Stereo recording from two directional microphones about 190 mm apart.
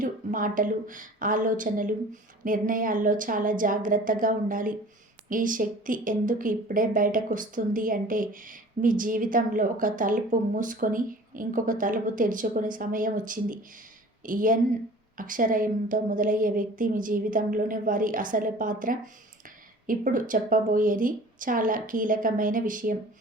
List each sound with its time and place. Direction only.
0.0 s a woman's voice: 45° right (ahead or behind)